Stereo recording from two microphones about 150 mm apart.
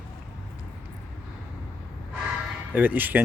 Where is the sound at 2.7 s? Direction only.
10° right (ahead or behind).